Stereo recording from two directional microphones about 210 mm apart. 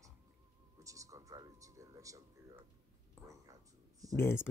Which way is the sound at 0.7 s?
15° right (ahead or behind).